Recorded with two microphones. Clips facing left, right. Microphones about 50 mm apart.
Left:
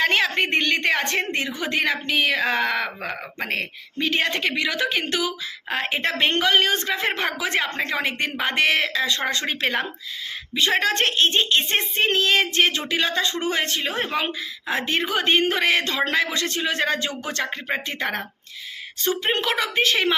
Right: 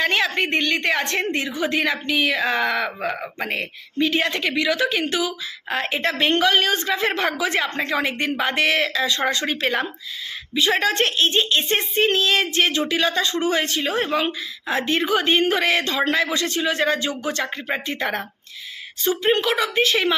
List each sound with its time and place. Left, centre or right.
0.0 s a sound: left
0.8 s a woman's voice: left
3.6 s a woman's voice: left
5.7 s a woman's voice: left
7.3 s a woman's voice: left
13.8 s a woman's voice: left